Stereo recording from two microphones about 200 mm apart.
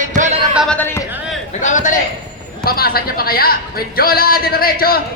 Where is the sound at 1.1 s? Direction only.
5° right (ahead or behind).